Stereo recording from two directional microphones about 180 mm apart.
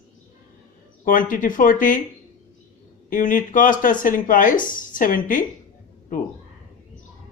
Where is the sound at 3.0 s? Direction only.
50° left (ahead or behind).